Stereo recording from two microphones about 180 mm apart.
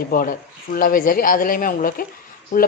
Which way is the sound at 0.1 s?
50° left (ahead or behind).